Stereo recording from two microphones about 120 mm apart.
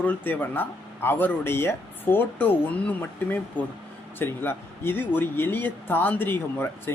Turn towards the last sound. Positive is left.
turn(degrees=15)  # may be behind; listen again after turning